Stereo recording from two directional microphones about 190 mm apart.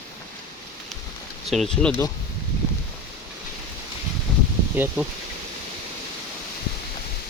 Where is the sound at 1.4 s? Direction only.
Centre (ahead or behind).